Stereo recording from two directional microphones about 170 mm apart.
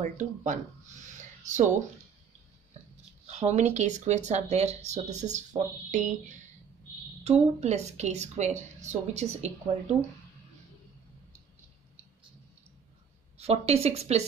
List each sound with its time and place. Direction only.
0.0 s speech: 45° right (ahead or behind)
3.3 s a woman's voice: 45° right (ahead or behind)
13.4 s a woman's voice: 35° right (ahead or behind)